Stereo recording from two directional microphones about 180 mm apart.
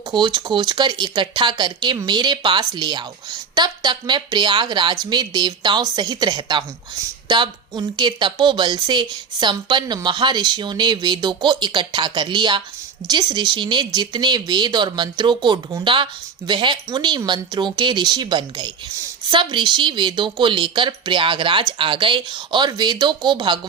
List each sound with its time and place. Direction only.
0.1 s speech: 25° right (ahead or behind)